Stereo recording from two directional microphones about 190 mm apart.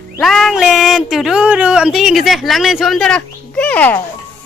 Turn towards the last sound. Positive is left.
turn(degrees=10)  # may be behind; listen again after turning